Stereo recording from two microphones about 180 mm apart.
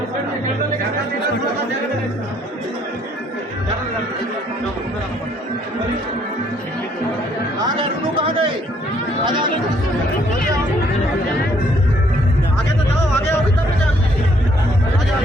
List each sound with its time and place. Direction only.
7.8 s speech: 25° right (ahead or behind)